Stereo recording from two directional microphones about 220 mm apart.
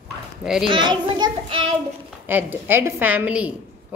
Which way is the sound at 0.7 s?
20° right (ahead or behind).